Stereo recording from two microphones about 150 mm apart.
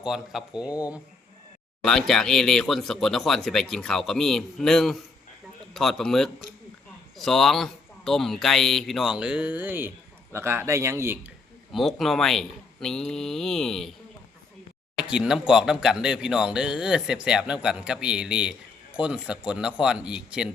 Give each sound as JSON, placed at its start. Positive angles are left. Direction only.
{"t": 0.0, "sound": "speech", "side_deg": -5}
{"t": 0.7, "sound": "speech", "side_deg": 25}
{"t": 1.8, "sound": "a man's voice", "side_deg": 5}
{"t": 11.7, "sound": "speech", "side_deg": 0}
{"t": 14.9, "sound": "speech", "side_deg": -5}